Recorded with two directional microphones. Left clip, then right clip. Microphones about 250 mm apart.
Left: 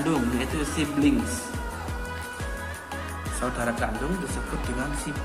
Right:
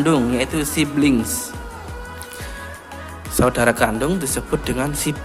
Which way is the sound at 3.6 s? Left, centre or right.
Right.